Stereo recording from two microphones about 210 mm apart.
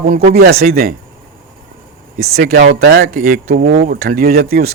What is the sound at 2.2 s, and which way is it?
A man's voice, 45° right (ahead or behind).